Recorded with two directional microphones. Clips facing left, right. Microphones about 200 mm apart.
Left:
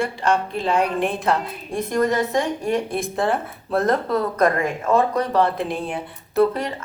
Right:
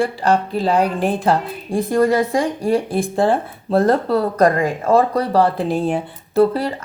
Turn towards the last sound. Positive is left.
turn(degrees=-30)  # may be behind; listen again after turning